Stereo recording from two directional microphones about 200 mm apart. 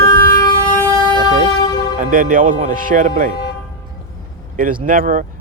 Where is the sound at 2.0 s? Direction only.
40° right (ahead or behind).